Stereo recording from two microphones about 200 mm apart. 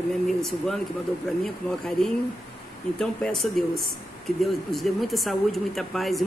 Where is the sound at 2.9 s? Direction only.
5° left (ahead or behind).